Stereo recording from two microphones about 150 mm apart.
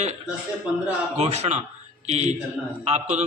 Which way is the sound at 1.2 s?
45° right (ahead or behind).